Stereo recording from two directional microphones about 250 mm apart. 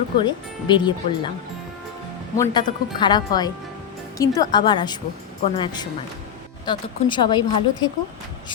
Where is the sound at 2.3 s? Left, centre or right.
Centre.